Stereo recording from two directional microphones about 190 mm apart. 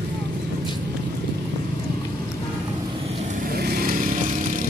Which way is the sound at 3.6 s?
50° right (ahead or behind).